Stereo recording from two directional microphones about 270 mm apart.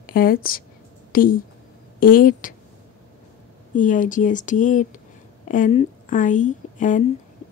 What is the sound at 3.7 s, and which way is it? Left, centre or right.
Speech, left.